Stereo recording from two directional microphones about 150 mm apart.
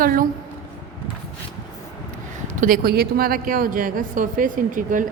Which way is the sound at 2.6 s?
70° right (ahead or behind).